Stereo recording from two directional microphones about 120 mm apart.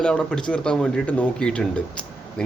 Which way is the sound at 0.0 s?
5° left (ahead or behind).